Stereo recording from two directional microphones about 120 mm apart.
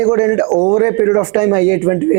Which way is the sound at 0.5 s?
35° right (ahead or behind).